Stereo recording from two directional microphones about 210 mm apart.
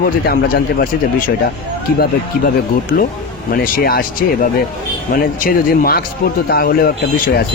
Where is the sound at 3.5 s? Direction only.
45° left (ahead or behind).